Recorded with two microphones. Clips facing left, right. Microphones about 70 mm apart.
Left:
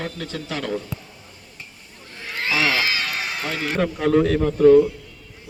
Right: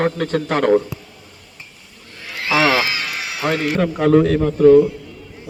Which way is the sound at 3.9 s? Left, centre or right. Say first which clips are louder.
Right 5 dB; right.